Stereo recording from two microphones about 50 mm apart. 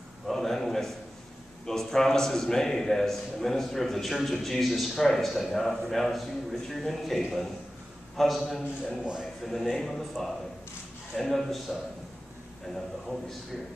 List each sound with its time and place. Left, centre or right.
0.3 s a sound: centre
1.7 s a man's voice: centre
9.0 s a man's voice: centre
9.4 s a man's voice: centre
11.1 s a man's voice: centre